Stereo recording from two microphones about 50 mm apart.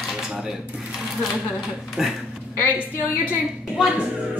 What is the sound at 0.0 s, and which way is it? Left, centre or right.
Dishes, centre.